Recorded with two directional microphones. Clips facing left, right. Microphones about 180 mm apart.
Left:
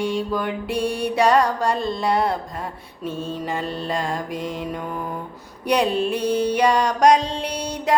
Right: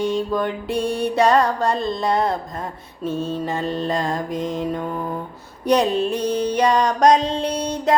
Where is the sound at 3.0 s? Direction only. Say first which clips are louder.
Right 3 dB; 40° right (ahead or behind).